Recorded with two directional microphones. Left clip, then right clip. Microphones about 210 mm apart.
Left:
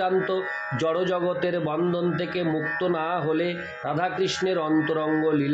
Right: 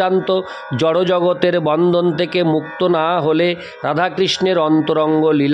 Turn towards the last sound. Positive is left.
turn(degrees=-55)  # may be behind; listen again after turning